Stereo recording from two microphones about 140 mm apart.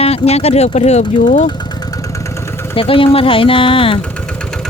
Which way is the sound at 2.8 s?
40° left (ahead or behind).